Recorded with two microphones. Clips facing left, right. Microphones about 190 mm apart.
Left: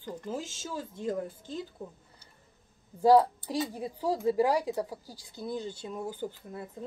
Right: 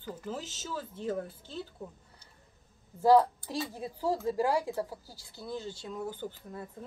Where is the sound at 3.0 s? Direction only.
15° left (ahead or behind).